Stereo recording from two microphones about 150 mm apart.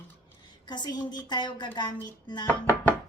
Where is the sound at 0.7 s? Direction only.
30° left (ahead or behind).